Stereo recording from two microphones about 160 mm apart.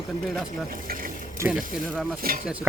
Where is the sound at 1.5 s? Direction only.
Centre (ahead or behind).